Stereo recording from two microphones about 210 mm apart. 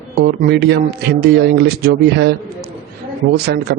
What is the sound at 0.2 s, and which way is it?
Speech, 50° right (ahead or behind).